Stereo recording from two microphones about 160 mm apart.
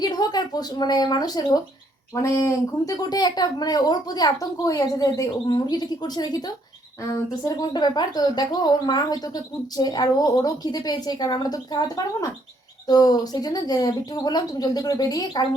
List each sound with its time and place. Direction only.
0.0 s a woman's voice: 25° left (ahead or behind)